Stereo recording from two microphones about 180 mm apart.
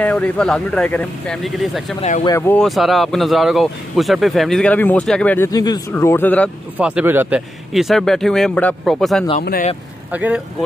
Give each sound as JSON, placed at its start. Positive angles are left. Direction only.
{"t": 0.0, "sound": "speech", "side_deg": 10}
{"t": 2.0, "sound": "speech", "side_deg": 45}
{"t": 2.2, "sound": "speech", "side_deg": 15}
{"t": 2.6, "sound": "speech", "side_deg": 0}
{"t": 5.5, "sound": "speech", "side_deg": 20}
{"t": 6.8, "sound": "speech", "side_deg": -10}
{"t": 9.4, "sound": "speech", "side_deg": 55}
{"t": 10.1, "sound": "speech", "side_deg": -10}